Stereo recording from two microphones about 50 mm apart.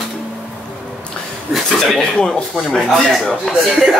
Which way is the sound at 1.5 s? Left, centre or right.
Centre.